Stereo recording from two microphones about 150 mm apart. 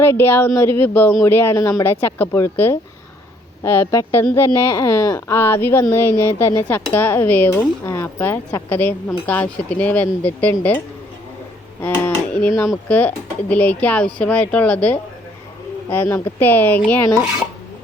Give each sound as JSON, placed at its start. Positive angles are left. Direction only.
{"t": 0.0, "sound": "speech", "side_deg": 15}
{"t": 11.8, "sound": "a sound", "side_deg": 15}
{"t": 12.7, "sound": "speech", "side_deg": 10}